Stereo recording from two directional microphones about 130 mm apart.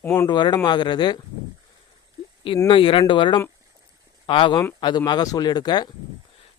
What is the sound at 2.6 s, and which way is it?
Speech, 45° left (ahead or behind).